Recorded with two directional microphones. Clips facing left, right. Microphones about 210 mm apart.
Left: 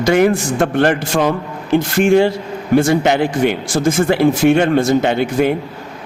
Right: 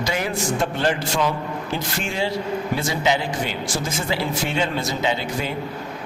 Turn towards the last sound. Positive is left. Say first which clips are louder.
# left 9 dB
turn(degrees=55)  # may be behind; listen again after turning